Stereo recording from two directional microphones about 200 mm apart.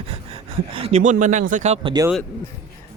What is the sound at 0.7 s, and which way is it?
A man's voice, 30° right (ahead or behind).